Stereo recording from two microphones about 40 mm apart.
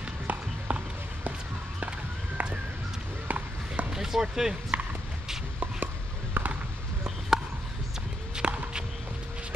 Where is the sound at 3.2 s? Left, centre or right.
Right.